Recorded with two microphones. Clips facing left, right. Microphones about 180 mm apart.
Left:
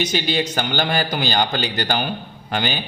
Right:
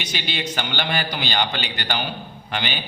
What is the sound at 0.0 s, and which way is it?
A man's voice, 45° left (ahead or behind).